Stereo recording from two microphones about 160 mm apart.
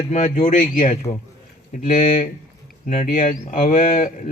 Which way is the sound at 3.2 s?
55° left (ahead or behind).